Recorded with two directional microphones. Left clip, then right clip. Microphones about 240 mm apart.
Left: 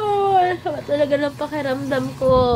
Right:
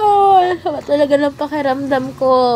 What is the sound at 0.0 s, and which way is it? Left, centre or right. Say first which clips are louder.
Speech: right 7 dB; centre.